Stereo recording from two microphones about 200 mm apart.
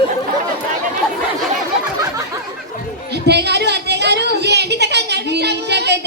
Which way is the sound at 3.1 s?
55° right (ahead or behind).